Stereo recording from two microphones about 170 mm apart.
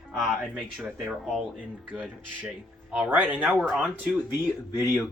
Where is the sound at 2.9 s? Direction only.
10° right (ahead or behind).